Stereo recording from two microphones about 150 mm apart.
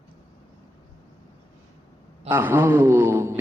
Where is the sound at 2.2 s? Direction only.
15° right (ahead or behind).